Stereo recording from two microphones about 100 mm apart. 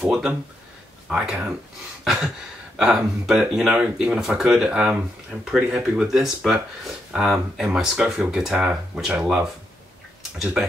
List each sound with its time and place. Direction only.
0.0 s speech: 10° right (ahead or behind)